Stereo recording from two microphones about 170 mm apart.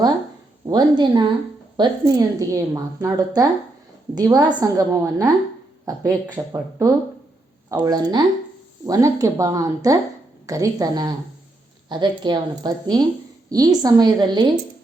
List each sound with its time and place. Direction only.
0.7 s a woman's voice: 25° right (ahead or behind)